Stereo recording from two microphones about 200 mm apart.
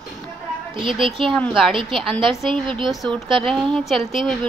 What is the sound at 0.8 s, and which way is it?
Speech, 25° right (ahead or behind).